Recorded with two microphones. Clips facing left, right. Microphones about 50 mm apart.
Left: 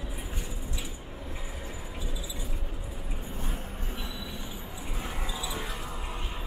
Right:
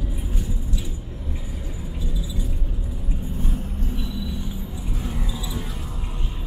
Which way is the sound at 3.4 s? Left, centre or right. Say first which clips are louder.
Right 7 dB; centre.